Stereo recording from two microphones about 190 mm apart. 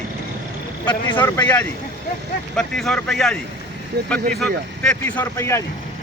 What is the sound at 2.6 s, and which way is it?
Speech, 5° left (ahead or behind).